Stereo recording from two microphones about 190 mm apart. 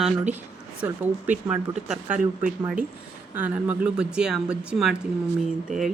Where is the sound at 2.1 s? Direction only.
45° right (ahead or behind).